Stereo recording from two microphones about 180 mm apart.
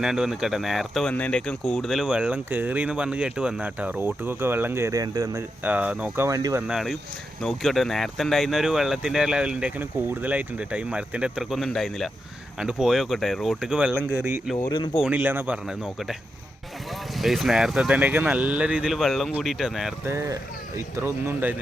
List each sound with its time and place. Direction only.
0.0 s speech: 5° right (ahead or behind); by 5.4 s 20° right (ahead or behind)
5.6 s speech: 10° right (ahead or behind)
14.5 s speech: 20° left (ahead or behind)
15.0 s speech: 10° right (ahead or behind)
17.2 s speech: centre (ahead or behind)
20.1 s speech: 15° right (ahead or behind)